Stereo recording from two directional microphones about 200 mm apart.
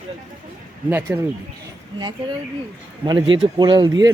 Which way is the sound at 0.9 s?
10° right (ahead or behind).